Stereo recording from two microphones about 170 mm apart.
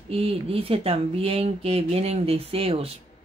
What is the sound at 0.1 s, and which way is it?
Speech, 35° right (ahead or behind).